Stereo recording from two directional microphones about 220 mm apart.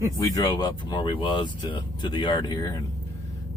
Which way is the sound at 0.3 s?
15° left (ahead or behind).